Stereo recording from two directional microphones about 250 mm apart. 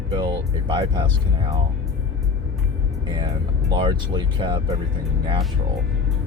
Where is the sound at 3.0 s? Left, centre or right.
Centre.